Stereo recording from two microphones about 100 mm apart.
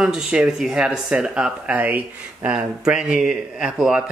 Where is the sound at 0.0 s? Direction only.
10° right (ahead or behind).